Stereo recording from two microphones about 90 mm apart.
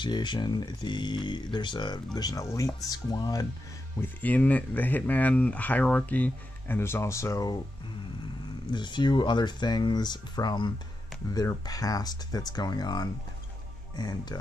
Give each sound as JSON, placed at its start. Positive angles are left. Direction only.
{"t": 0.0, "sound": "speech", "side_deg": 60}
{"t": 2.4, "sound": "speech", "side_deg": 35}
{"t": 4.0, "sound": "speech", "side_deg": 20}
{"t": 6.8, "sound": "speech", "side_deg": 30}
{"t": 8.7, "sound": "speech", "side_deg": 60}